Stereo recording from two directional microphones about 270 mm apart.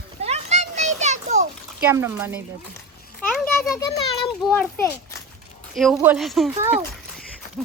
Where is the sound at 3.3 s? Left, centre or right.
Centre.